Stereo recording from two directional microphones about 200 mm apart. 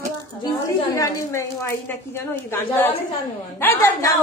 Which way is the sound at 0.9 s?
15° left (ahead or behind).